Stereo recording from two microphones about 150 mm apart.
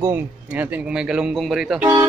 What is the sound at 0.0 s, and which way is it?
Speech, 10° right (ahead or behind).